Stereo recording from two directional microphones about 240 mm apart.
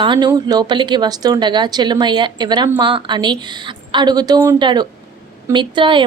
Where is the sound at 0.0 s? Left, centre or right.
Centre.